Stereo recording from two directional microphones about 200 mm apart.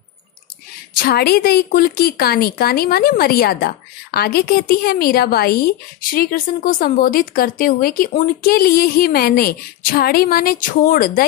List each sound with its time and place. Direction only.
0.9 s speech: 50° left (ahead or behind)